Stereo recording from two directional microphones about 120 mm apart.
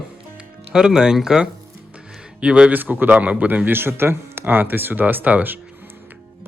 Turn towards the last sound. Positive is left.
turn(degrees=-15)  # may be behind; listen again after turning